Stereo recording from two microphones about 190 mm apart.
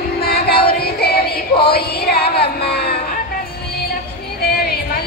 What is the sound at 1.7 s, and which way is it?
Music, 55° left (ahead or behind).